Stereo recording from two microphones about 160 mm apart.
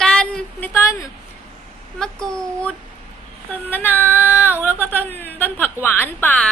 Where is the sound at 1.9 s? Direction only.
5° left (ahead or behind).